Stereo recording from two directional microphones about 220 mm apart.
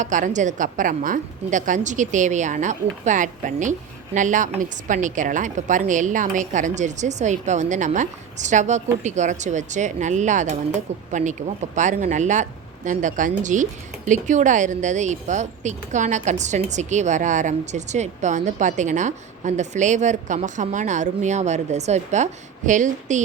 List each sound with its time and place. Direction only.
0.0 s speech: 35° right (ahead or behind)